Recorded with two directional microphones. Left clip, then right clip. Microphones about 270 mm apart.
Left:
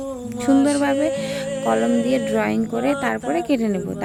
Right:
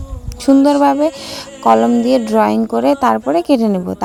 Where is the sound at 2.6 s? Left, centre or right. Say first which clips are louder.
Right 8 dB; centre.